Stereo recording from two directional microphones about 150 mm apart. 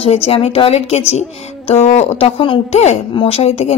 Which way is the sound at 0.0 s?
40° left (ahead or behind).